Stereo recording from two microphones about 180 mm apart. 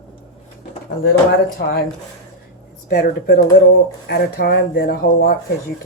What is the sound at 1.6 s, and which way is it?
Speech, 65° left (ahead or behind).